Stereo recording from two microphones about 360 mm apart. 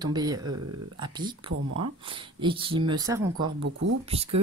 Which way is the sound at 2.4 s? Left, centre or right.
Centre.